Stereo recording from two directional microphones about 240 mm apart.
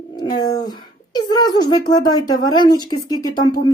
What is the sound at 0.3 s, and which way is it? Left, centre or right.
Speech, centre.